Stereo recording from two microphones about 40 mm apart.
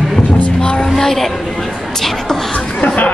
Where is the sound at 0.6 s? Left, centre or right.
Left.